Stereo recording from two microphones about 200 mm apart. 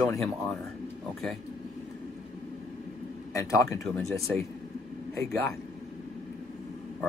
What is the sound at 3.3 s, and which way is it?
Speech, 15° left (ahead or behind).